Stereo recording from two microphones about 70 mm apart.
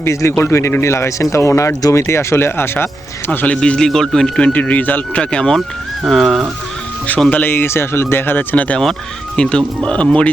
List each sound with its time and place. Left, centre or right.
0.0 s speech: left
3.4 s a man's voice: centre
5.5 s speech: centre
7.3 s speech: left
8.8 s a man's voice: centre